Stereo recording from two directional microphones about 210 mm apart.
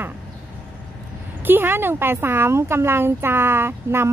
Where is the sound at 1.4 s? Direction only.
10° right (ahead or behind).